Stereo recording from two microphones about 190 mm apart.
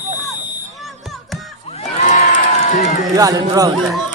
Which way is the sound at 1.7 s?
35° left (ahead or behind).